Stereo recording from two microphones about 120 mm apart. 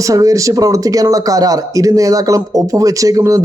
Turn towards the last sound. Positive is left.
turn(degrees=-30)  # may be behind; listen again after turning